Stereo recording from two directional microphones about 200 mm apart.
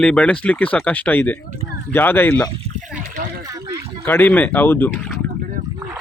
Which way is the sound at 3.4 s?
15° right (ahead or behind).